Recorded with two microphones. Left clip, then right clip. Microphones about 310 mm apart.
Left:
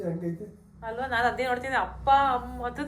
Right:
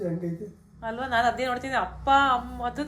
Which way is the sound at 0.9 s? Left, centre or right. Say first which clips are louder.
Right 2 dB; right.